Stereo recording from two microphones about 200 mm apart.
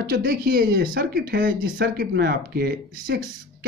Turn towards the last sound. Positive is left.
turn(degrees=-50)  # may be behind; listen again after turning